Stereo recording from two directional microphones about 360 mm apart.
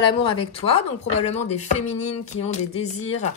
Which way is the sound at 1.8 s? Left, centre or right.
Centre.